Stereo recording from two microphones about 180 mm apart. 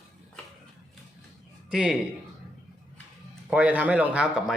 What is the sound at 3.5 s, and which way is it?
Speech, 10° right (ahead or behind).